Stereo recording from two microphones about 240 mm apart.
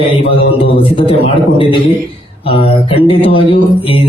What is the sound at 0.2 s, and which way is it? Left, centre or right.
A man's voice, left.